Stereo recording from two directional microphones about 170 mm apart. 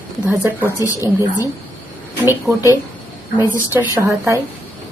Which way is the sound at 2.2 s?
15° right (ahead or behind).